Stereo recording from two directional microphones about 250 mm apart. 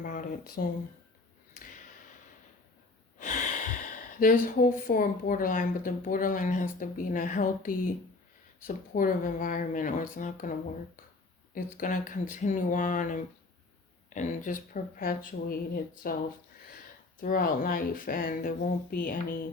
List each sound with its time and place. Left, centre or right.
0.0 s speech: left
3.2 s speech: left
11.5 s speech: left
17.2 s speech: left